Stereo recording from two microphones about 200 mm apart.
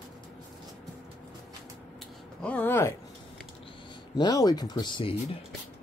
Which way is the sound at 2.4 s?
5° left (ahead or behind).